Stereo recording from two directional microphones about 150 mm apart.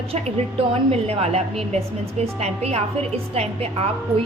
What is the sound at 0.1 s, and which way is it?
A woman's voice, 40° right (ahead or behind).